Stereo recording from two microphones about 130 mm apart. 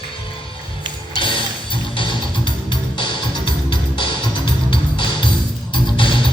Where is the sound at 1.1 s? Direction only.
40° left (ahead or behind).